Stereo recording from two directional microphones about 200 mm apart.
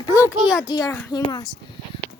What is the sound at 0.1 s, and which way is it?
Speech, 5° right (ahead or behind).